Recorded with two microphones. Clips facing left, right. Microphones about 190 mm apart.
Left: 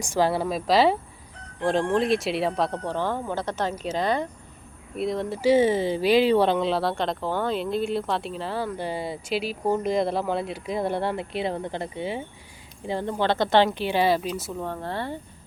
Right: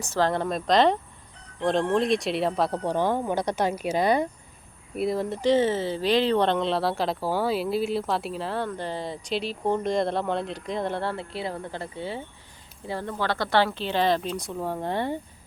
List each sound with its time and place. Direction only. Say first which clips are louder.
0.0 s speech: left 1 dB; 10° left (ahead or behind)
2.8 s speech: right 3 dB; 15° right (ahead or behind); by 14.6 s 5° left (ahead or behind)
14.6 s speech: right 6 dB; 15° right (ahead or behind)